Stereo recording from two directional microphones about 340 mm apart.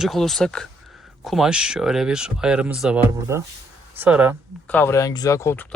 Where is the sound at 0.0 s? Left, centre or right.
Centre.